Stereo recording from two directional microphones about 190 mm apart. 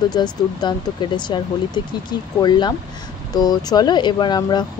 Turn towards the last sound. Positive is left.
turn(degrees=25)  # may be behind; listen again after turning